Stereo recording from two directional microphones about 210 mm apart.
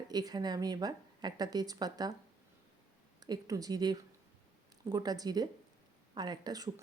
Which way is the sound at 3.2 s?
15° right (ahead or behind).